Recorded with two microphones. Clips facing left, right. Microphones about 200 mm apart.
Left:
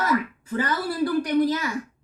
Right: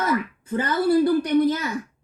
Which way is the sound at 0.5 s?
25° right (ahead or behind).